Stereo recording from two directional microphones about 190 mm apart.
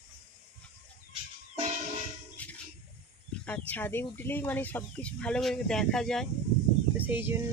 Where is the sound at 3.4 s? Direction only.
5° left (ahead or behind).